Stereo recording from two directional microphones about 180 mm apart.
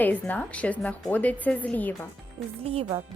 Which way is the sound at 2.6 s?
30° right (ahead or behind).